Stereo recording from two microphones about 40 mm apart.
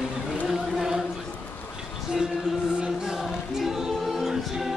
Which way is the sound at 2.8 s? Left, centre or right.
Centre.